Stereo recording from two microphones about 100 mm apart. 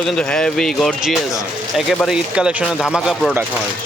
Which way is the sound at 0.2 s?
10° left (ahead or behind).